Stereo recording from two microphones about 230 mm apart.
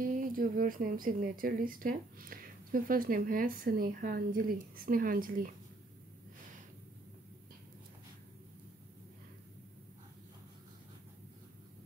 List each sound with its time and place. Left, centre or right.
0.0 s speech: right